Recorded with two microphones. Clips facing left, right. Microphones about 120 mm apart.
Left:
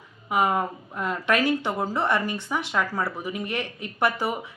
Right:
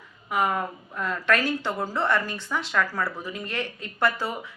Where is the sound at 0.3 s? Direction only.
20° left (ahead or behind).